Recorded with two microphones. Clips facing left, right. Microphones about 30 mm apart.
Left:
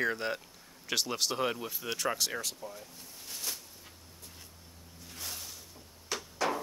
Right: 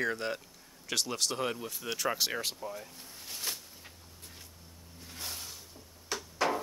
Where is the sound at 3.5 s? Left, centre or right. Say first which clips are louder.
Right 2 dB; right.